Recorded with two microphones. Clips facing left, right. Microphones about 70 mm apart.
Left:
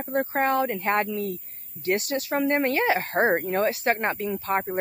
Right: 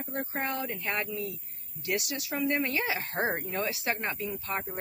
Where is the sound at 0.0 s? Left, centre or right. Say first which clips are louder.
Left 9 dB; left.